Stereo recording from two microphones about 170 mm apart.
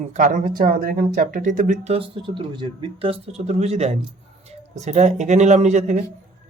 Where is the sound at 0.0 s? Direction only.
45° right (ahead or behind).